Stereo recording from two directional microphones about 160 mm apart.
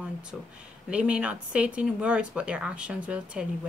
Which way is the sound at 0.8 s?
5° right (ahead or behind).